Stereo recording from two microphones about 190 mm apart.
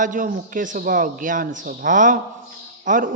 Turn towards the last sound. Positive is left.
turn(degrees=-45)  # may be behind; listen again after turning